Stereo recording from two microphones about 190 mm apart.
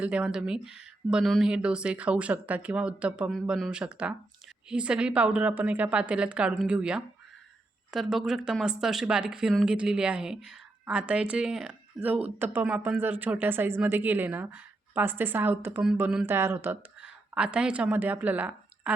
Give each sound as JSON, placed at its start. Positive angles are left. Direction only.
{"t": 0.0, "sound": "speech", "side_deg": -5}